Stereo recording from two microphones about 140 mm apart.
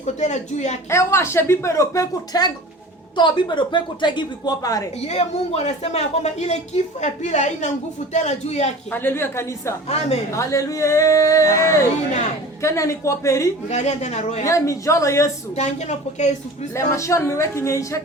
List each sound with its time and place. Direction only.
0.0 s speech: 55° left (ahead or behind)
0.9 s a woman's voice: 20° left (ahead or behind)
4.9 s speech: 50° left (ahead or behind)
8.9 s a woman's voice: 15° left (ahead or behind)
13.7 s speech: 55° left (ahead or behind)
14.4 s speech: 20° left (ahead or behind)
15.5 s speech: 55° left (ahead or behind)
16.7 s speech: 20° left (ahead or behind)